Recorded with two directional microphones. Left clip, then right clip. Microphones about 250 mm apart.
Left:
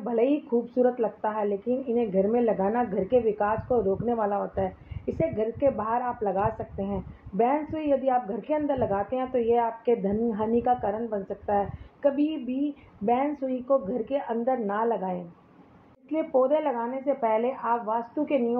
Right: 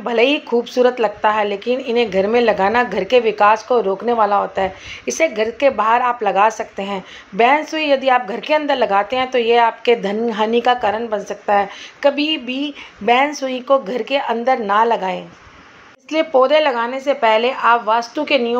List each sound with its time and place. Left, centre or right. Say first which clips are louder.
0.0 s speech: right 10 dB; centre
16.3 s speech: right 10 dB; right